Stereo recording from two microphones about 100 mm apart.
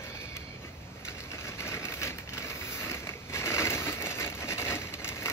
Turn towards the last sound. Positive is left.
turn(degrees=25)  # may be behind; listen again after turning